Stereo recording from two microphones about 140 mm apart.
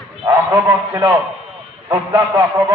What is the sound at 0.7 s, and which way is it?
A man's voice, 20° right (ahead or behind).